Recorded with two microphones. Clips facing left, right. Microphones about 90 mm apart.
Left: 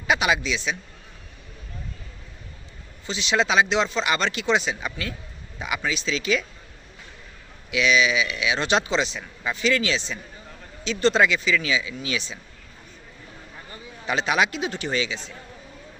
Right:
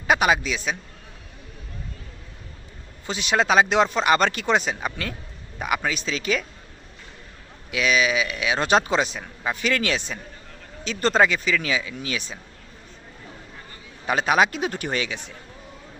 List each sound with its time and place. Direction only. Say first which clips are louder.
0.1 s a man's voice: right 2 dB; 45° right (ahead or behind)
3.1 s a man's voice: right 2 dB; 50° right (ahead or behind)
7.7 s a man's voice: left 1 dB; 45° right (ahead or behind)
14.1 s a man's voice: right 3 dB; 45° right (ahead or behind)